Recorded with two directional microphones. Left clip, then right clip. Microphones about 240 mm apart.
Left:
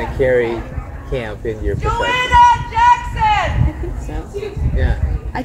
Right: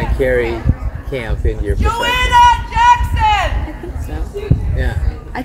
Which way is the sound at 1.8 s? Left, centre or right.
Right.